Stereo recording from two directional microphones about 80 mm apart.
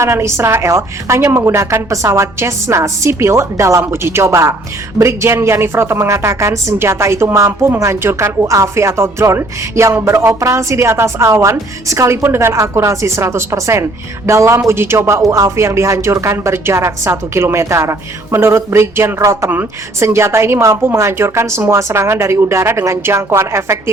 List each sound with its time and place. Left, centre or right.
0.0 s speech: right